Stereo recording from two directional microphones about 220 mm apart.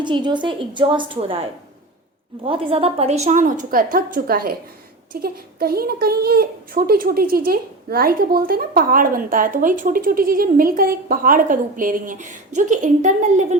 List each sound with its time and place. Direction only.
0.0 s a woman's voice: 20° right (ahead or behind)